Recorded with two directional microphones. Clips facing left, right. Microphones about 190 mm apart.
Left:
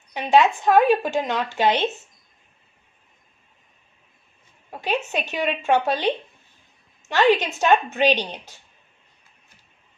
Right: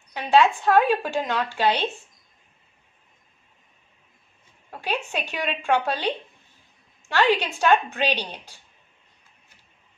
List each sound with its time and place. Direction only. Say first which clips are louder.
0.1 s a woman's voice: left 1 dB; 15° left (ahead or behind)
4.6 s a sound: left 2 dB; 15° left (ahead or behind)
4.9 s a woman's voice: left 4 dB; 10° right (ahead or behind)
5.3 s a woman's voice: left 3 dB; 20° left (ahead or behind)